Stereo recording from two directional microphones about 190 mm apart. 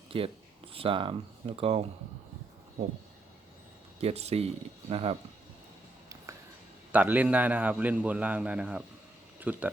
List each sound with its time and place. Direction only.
0.1 s speech: 30° right (ahead or behind)
4.0 s speech: 35° right (ahead or behind)
6.9 s a man's voice: 10° right (ahead or behind)